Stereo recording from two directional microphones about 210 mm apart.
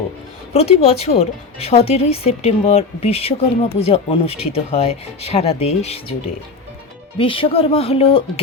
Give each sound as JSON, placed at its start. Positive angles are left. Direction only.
{"t": 0.5, "sound": "a woman's voice", "side_deg": 30}